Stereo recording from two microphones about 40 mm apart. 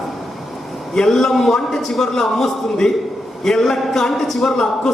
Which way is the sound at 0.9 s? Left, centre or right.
Centre.